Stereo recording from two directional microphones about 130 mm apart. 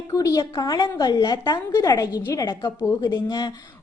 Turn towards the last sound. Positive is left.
turn(degrees=30)  # may be behind; listen again after turning